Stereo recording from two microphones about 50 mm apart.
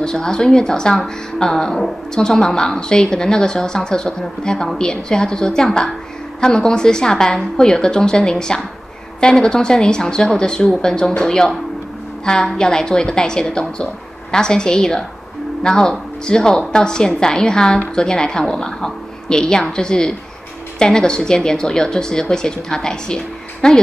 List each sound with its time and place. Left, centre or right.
0.0 s speech: centre